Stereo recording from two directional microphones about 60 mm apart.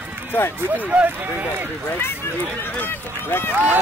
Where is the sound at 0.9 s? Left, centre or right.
Right.